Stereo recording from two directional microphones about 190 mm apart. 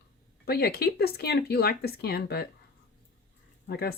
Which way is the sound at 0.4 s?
55° left (ahead or behind).